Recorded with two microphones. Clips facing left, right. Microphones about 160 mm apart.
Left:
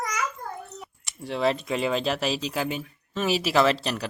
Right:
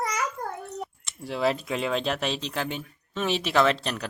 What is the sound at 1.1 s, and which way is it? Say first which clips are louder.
Speech: left 1 dB; centre (ahead or behind).